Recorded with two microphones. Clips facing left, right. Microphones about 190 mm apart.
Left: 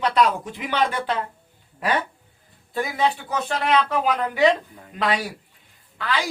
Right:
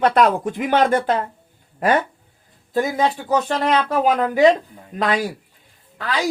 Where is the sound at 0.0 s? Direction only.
50° right (ahead or behind).